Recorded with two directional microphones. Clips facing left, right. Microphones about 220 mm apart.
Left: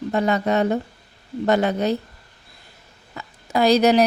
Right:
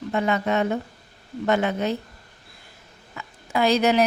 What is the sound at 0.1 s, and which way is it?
A woman's voice, 35° left (ahead or behind).